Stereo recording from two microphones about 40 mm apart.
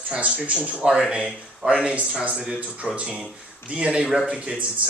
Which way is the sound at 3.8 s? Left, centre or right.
Right.